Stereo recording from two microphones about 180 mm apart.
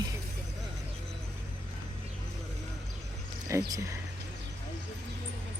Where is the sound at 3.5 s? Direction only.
15° right (ahead or behind).